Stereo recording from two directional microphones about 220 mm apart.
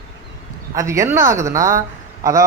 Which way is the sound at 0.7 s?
15° right (ahead or behind).